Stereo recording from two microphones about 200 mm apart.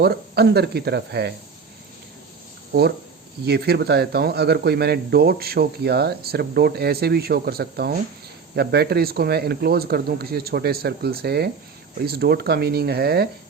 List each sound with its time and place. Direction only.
0.0 s speech: 55° right (ahead or behind)
3.4 s speech: 55° right (ahead or behind)